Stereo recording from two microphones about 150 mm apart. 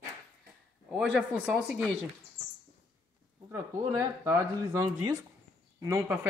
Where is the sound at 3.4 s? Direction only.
20° right (ahead or behind).